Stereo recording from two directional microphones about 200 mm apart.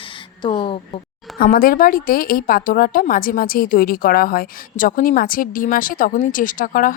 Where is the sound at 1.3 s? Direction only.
45° left (ahead or behind).